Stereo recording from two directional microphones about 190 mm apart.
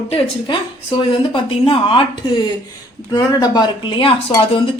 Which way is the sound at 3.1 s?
20° left (ahead or behind).